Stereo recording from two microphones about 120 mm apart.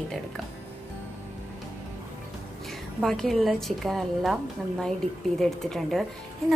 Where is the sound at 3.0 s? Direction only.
Centre (ahead or behind).